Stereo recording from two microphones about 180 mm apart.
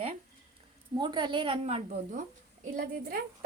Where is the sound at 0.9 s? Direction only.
25° right (ahead or behind).